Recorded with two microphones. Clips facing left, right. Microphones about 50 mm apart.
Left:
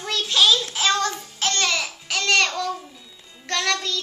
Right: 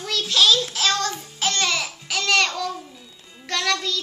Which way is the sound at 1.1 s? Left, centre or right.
Centre.